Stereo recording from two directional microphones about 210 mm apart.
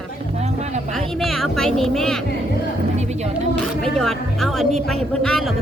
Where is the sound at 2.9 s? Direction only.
35° right (ahead or behind).